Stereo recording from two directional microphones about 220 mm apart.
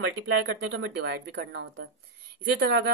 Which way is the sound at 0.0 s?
60° right (ahead or behind).